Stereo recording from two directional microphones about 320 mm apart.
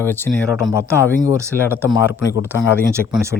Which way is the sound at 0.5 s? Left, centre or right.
Centre.